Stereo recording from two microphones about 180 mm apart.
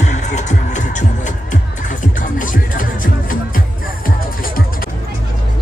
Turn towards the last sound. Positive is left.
turn(degrees=55)  # may be behind; listen again after turning